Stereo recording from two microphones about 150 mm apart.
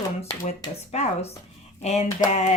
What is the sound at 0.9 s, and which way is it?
Speech, 45° left (ahead or behind).